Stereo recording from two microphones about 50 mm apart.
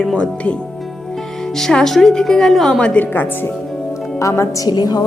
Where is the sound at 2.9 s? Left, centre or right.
Left.